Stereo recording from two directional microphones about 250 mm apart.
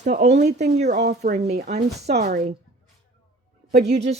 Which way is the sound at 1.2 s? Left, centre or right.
Right.